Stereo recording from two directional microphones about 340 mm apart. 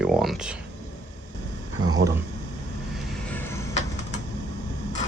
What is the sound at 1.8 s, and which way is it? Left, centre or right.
Speech, right.